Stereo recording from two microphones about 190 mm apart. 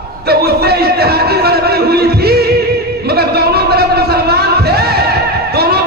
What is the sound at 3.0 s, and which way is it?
Music, 55° right (ahead or behind).